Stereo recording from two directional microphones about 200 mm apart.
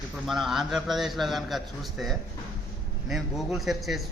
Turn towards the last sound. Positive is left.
turn(degrees=0)  # may be behind; listen again after turning